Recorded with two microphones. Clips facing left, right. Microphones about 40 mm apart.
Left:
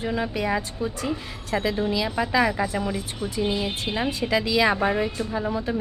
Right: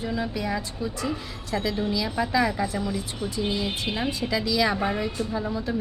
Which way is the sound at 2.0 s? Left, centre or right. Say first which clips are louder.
Left 1 dB; centre.